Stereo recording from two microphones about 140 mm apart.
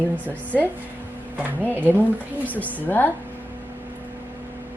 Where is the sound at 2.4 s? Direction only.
10° left (ahead or behind).